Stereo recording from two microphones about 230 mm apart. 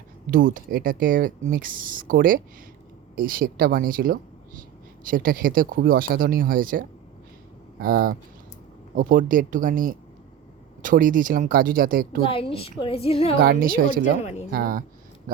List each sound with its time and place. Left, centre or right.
0.3 s speech: right
12.2 s a woman's voice: left
13.4 s speech: right
14.2 s a woman's voice: left
14.5 s speech: right